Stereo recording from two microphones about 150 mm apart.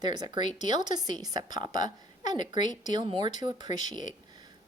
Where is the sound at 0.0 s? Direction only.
30° right (ahead or behind).